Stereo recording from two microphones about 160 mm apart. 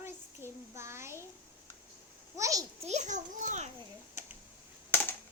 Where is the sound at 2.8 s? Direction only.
45° right (ahead or behind).